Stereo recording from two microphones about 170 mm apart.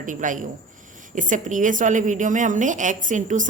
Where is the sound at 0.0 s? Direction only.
50° right (ahead or behind).